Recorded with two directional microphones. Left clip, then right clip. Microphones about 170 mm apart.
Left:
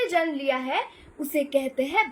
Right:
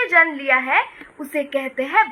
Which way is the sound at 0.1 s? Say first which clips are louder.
Right 9 dB; 20° left (ahead or behind).